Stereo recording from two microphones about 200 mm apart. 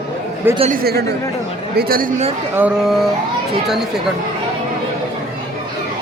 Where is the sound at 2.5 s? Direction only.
5° right (ahead or behind).